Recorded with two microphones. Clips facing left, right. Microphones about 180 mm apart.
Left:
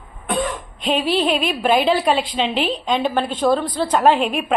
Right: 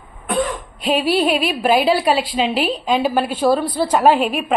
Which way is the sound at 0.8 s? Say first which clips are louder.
Right 2 dB; 10° right (ahead or behind).